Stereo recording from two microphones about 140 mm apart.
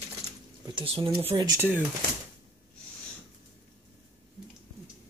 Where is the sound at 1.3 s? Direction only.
25° right (ahead or behind).